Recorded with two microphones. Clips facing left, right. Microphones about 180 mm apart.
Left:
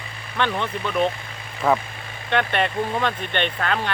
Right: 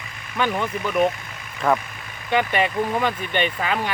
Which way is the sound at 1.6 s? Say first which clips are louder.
Even; 5° left (ahead or behind).